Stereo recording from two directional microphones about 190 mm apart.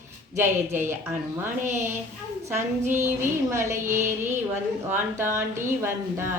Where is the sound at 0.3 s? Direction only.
10° right (ahead or behind).